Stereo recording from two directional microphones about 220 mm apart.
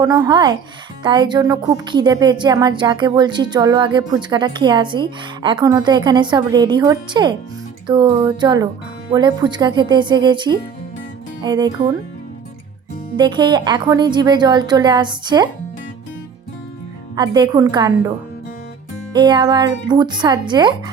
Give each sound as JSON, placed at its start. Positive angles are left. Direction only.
{"t": 0.0, "sound": "a woman's voice", "side_deg": -15}
{"t": 13.1, "sound": "a woman's voice", "side_deg": -20}
{"t": 17.2, "sound": "a woman's voice", "side_deg": -20}
{"t": 19.1, "sound": "a woman's voice", "side_deg": -20}